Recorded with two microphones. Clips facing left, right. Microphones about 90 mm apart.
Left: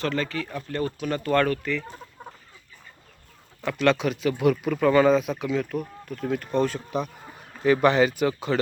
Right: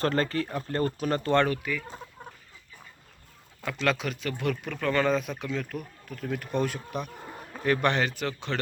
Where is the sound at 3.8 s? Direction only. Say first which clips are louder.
Left 7 dB; centre (ahead or behind).